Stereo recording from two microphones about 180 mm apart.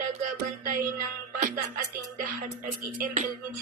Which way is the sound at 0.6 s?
45° right (ahead or behind).